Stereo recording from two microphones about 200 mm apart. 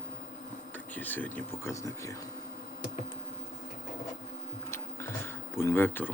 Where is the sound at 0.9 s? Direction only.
10° left (ahead or behind).